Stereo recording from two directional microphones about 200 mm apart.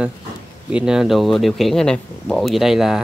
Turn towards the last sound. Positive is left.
turn(degrees=0)  # may be behind; listen again after turning